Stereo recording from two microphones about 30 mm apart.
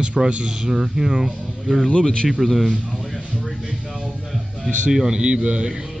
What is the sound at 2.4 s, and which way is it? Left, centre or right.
Speech, centre.